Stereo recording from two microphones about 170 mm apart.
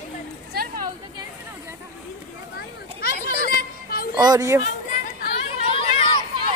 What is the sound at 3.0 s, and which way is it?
Children playing, 60° left (ahead or behind).